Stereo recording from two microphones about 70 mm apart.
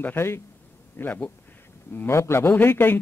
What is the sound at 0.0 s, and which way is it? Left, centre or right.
A man's voice, left.